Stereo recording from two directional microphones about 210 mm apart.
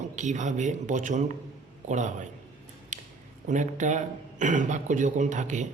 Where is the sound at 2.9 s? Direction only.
35° right (ahead or behind).